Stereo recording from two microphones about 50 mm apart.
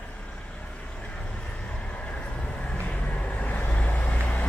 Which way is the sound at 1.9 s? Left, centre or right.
Left.